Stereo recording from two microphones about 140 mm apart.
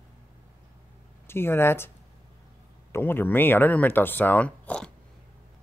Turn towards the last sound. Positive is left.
turn(degrees=10)  # may be behind; listen again after turning